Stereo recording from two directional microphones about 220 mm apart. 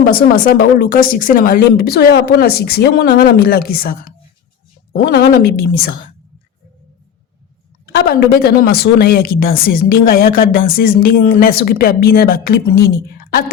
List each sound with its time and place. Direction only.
0.0 s speech: 40° left (ahead or behind)
7.9 s speech: 45° left (ahead or behind)